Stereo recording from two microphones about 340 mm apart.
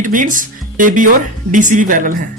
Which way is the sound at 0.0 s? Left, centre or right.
Right.